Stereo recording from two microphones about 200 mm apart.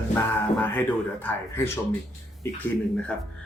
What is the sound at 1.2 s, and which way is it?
Speech, 10° left (ahead or behind).